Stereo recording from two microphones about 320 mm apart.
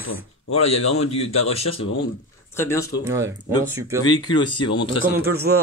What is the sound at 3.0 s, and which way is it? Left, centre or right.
Speech, centre.